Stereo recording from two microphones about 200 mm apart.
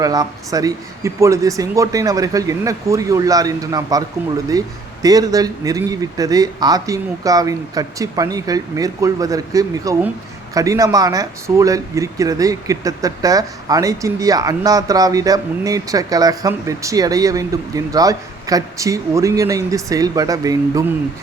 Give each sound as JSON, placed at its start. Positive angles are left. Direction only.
{"t": 0.0, "sound": "speech", "side_deg": -20}